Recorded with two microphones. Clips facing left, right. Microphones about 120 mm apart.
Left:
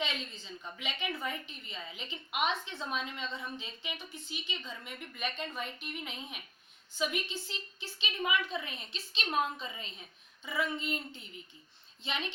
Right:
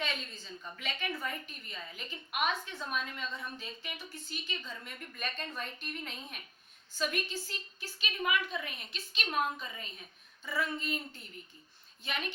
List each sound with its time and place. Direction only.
0.0 s a woman's voice: 20° left (ahead or behind)